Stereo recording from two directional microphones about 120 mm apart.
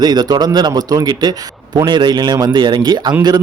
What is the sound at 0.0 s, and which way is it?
Speech, 35° right (ahead or behind).